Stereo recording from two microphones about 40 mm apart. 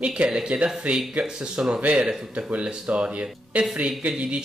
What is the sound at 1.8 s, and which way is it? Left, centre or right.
Speech, right.